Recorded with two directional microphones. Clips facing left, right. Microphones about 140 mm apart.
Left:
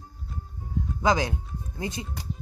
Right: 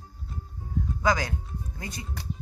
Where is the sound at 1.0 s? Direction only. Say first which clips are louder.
Left 2 dB; 20° left (ahead or behind).